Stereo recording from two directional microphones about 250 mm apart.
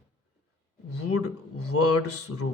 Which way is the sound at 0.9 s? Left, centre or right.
Left.